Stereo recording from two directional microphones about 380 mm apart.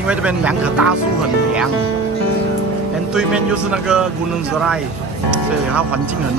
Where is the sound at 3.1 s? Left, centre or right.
Centre.